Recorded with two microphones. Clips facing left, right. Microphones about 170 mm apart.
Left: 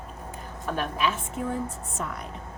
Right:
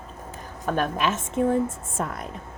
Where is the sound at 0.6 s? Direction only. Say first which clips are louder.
Right 3 dB; 45° right (ahead or behind).